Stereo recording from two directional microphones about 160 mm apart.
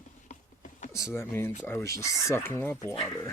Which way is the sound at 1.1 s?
15° left (ahead or behind).